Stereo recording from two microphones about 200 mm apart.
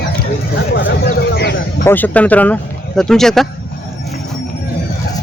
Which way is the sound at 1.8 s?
10° left (ahead or behind).